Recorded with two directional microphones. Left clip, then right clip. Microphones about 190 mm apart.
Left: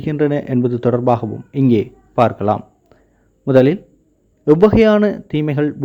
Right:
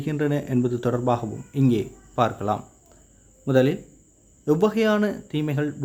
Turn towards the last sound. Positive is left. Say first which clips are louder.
# left 8 dB
turn(degrees=35)  # may be behind; listen again after turning